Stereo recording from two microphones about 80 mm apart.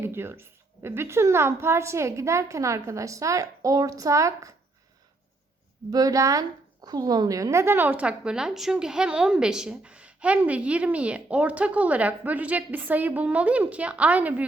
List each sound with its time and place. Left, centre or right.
0.0 s a woman's voice: right
5.9 s a woman's voice: right; by 14.4 s centre